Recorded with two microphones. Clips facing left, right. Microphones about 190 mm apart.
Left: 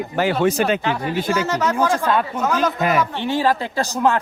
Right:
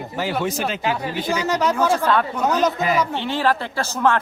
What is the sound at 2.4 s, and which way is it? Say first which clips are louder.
Speech: right 2 dB; 20° right (ahead or behind).